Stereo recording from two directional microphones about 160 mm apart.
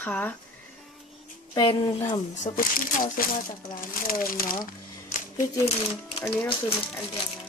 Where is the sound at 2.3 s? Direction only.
55° left (ahead or behind).